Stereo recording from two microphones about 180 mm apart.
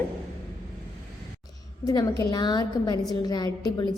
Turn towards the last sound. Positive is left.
turn(degrees=20)  # may be behind; listen again after turning